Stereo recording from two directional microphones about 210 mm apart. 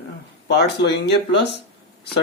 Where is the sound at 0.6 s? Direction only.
50° left (ahead or behind).